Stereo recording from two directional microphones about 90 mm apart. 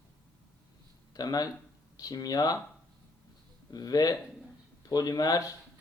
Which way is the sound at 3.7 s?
45° left (ahead or behind).